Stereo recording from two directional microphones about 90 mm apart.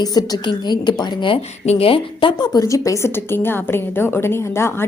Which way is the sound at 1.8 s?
90° left.